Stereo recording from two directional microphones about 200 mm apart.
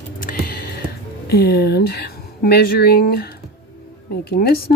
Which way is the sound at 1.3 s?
50° left (ahead or behind).